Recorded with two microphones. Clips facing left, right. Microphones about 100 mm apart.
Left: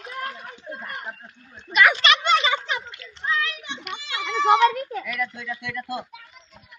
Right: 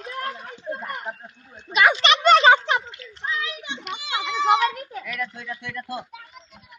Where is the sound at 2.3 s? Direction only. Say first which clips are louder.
Right 7 dB; 65° right (ahead or behind).